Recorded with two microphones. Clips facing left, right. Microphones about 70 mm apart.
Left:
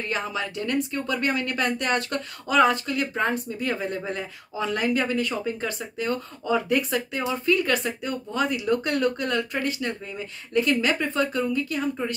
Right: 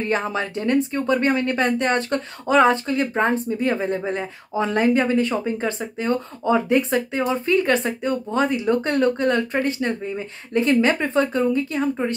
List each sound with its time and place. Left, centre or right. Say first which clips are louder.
0.0 s speech: right 6 dB; right